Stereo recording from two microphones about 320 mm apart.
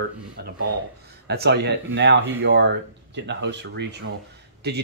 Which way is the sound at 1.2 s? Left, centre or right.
Right.